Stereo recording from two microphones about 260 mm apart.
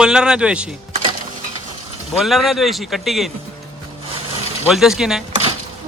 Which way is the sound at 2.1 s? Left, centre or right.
Centre.